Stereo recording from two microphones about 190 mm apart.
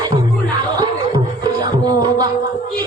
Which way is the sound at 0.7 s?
20° right (ahead or behind).